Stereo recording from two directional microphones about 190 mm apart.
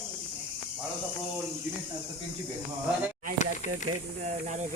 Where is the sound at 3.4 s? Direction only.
40° left (ahead or behind).